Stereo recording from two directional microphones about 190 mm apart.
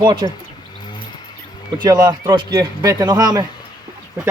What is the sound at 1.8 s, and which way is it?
A man's voice, 20° right (ahead or behind).